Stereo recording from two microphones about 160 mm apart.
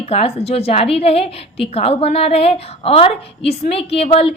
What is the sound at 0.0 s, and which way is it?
A woman's voice, 40° left (ahead or behind).